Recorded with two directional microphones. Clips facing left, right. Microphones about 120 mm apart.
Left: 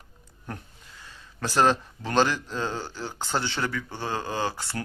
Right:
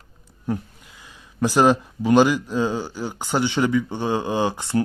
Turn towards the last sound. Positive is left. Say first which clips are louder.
# right 8 dB
turn(degrees=-20)  # may be behind; listen again after turning